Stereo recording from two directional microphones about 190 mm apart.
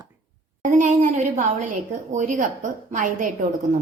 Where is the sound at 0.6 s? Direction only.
40° right (ahead or behind).